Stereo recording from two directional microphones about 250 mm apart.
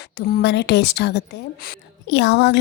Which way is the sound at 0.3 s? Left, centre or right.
Left.